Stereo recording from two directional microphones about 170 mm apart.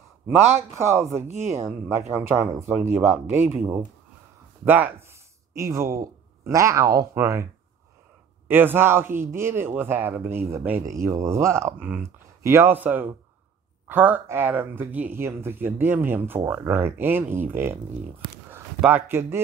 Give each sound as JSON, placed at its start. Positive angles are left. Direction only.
{"t": 0.7, "sound": "speech", "side_deg": -15}
{"t": 1.1, "sound": "speech", "side_deg": -40}
{"t": 2.0, "sound": "speech", "side_deg": -15}
{"t": 4.6, "sound": "speech", "side_deg": -10}
{"t": 8.5, "sound": "speech", "side_deg": -10}
{"t": 18.8, "sound": "speech", "side_deg": -10}